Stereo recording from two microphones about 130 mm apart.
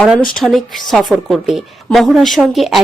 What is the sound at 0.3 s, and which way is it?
A woman's voice, centre (ahead or behind).